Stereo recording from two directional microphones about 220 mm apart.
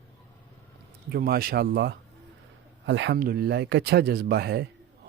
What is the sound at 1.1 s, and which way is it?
Speech, 45° right (ahead or behind).